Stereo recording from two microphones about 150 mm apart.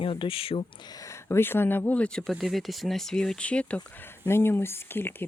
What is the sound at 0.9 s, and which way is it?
Speech, 20° left (ahead or behind).